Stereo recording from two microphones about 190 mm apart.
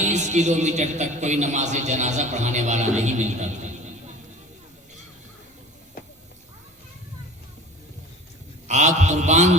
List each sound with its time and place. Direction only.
0.0 s a man's voice: 40° right (ahead or behind)
8.6 s a man's voice: 40° right (ahead or behind)